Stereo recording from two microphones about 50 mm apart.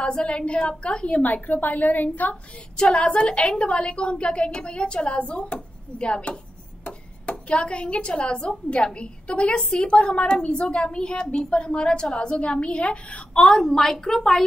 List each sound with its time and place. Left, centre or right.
0.0 s speech: centre
1.2 s a woman's voice: left
2.8 s speech: centre
13.5 s a woman's voice: centre